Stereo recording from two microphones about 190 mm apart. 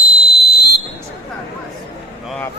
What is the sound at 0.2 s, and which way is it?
Whistle, 55° left (ahead or behind).